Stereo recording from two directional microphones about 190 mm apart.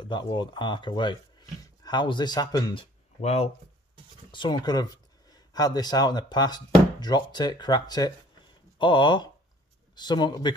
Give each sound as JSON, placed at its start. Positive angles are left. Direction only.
{"t": 0.0, "sound": "speech", "side_deg": 25}